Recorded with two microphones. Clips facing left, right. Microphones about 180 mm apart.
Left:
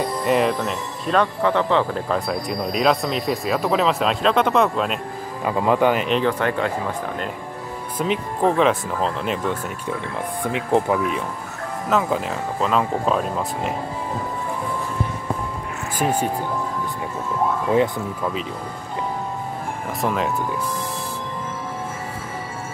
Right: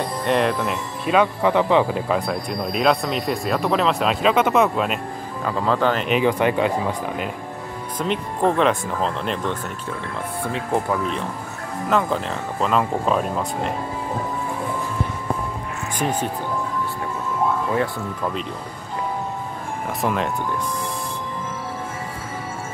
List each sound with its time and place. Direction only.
0.2 s speech: 5° left (ahead or behind)
2.1 s speech: centre (ahead or behind)
5.4 s speech: 15° left (ahead or behind)
6.0 s speech: 10° right (ahead or behind)
8.0 s speech: 5° left (ahead or behind)
10.4 s speech: 15° left (ahead or behind); by 13.7 s centre (ahead or behind)
16.0 s speech: 10° left (ahead or behind)
20.0 s speech: centre (ahead or behind)